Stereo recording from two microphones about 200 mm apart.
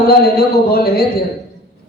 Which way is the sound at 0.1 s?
50° left (ahead or behind).